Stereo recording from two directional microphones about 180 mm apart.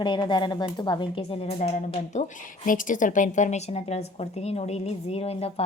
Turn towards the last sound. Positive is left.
turn(degrees=35)  # may be behind; listen again after turning